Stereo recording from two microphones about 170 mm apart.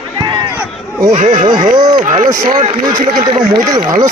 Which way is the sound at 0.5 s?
10° right (ahead or behind).